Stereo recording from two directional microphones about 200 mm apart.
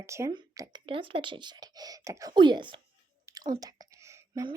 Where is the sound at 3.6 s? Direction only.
15° right (ahead or behind).